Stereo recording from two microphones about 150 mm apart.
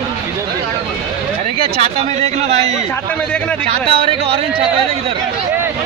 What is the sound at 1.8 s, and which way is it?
Speech, 45° right (ahead or behind).